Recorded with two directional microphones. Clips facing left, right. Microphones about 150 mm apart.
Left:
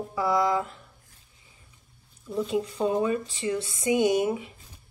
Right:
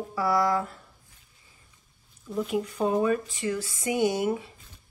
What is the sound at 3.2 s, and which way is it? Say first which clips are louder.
Speech: left 1 dB; 25° left (ahead or behind).